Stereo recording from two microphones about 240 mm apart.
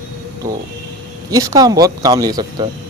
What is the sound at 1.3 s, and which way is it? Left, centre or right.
Speech, centre.